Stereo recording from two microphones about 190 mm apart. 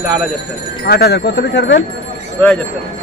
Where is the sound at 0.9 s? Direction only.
55° left (ahead or behind).